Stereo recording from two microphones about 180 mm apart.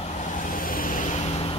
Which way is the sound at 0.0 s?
40° left (ahead or behind).